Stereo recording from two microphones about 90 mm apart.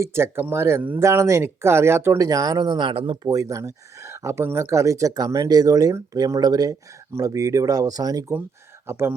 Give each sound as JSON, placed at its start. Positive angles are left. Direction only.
{"t": 0.0, "sound": "speech", "side_deg": -30}
{"t": 2.9, "sound": "speech", "side_deg": -90}
{"t": 3.2, "sound": "speech", "side_deg": -40}
{"t": 8.9, "sound": "speech", "side_deg": -25}